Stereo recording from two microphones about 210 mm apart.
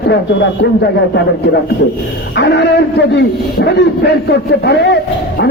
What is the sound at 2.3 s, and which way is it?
A man's voice, 55° left (ahead or behind).